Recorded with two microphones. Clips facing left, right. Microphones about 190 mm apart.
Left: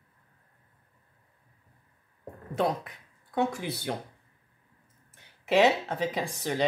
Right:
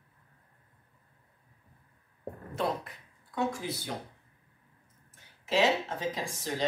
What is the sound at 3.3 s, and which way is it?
Speech, 60° left (ahead or behind).